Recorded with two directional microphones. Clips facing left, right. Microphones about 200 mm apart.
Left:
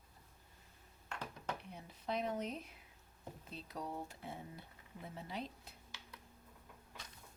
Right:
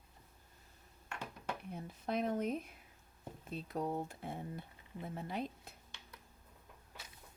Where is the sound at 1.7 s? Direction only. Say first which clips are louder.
Right 5 dB; 50° right (ahead or behind).